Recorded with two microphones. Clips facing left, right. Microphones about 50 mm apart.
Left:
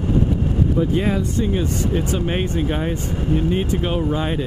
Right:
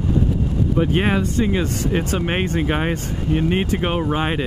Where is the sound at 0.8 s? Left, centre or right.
Right.